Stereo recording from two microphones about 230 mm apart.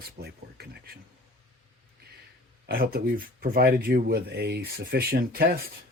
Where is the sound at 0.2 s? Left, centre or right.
Right.